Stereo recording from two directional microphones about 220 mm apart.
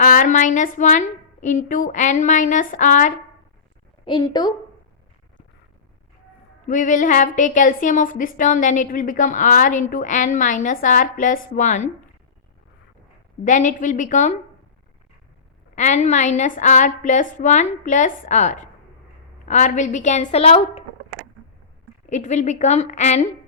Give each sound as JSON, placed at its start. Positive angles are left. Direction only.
{"t": 0.0, "sound": "a woman's voice", "side_deg": 40}
{"t": 4.0, "sound": "a woman's voice", "side_deg": 20}
{"t": 6.7, "sound": "a woman's voice", "side_deg": 35}
{"t": 13.4, "sound": "a woman's voice", "side_deg": 35}
{"t": 15.7, "sound": "a woman's voice", "side_deg": 35}
{"t": 22.0, "sound": "a woman's voice", "side_deg": 35}